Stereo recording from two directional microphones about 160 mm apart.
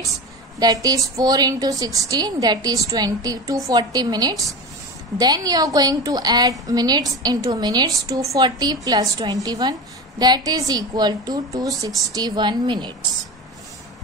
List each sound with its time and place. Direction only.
0.6 s a woman's voice: 25° right (ahead or behind)